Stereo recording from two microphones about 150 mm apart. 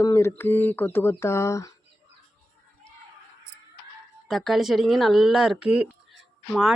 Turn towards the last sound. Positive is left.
turn(degrees=0)  # may be behind; listen again after turning